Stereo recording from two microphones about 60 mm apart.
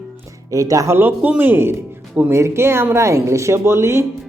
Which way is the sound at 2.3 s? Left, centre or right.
Right.